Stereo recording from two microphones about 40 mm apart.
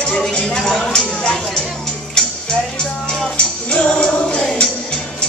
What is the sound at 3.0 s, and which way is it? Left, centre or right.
Music, left.